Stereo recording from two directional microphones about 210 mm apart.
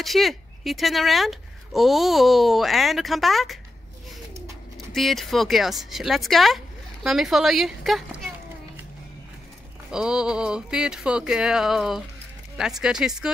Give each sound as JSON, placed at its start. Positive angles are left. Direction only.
{"t": 0.0, "sound": "speech", "side_deg": 0}
{"t": 4.9, "sound": "speech", "side_deg": 0}
{"t": 9.8, "sound": "speech", "side_deg": -5}